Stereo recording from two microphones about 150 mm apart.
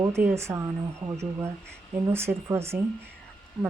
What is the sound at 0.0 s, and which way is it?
Speech, 20° right (ahead or behind).